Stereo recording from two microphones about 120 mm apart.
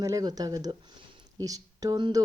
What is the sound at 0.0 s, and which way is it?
A woman's voice, 30° right (ahead or behind).